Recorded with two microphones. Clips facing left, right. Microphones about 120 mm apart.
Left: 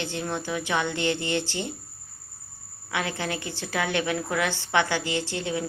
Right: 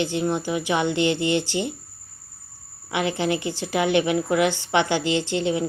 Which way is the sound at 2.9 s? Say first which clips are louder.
Right 6 dB; 20° right (ahead or behind).